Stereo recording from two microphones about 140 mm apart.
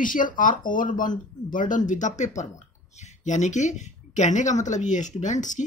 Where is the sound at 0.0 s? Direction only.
70° left (ahead or behind).